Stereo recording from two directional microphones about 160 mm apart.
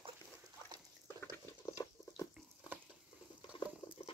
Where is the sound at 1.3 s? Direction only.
20° left (ahead or behind).